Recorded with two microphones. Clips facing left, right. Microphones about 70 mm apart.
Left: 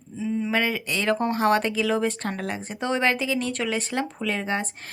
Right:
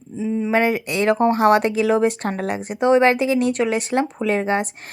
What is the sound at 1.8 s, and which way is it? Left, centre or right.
Speech, right.